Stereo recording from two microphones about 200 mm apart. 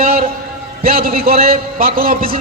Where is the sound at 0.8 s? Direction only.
50° right (ahead or behind).